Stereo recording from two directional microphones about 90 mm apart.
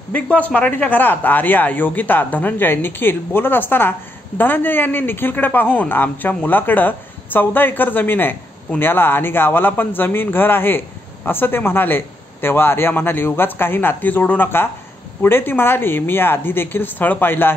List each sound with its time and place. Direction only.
0.1 s speech: 15° left (ahead or behind)